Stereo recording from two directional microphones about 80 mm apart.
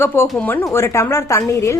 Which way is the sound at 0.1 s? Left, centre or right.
Left.